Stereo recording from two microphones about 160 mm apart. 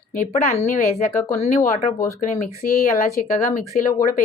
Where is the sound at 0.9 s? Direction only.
40° left (ahead or behind).